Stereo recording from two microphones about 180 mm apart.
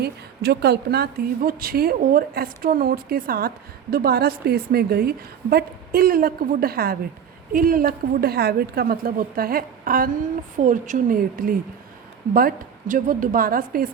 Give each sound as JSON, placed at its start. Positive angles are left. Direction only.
{"t": 0.0, "sound": "a woman's voice", "side_deg": -65}